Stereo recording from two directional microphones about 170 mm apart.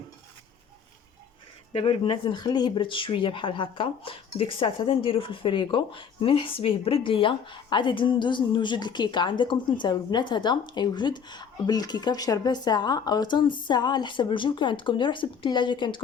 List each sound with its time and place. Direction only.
1.7 s speech: 30° left (ahead or behind)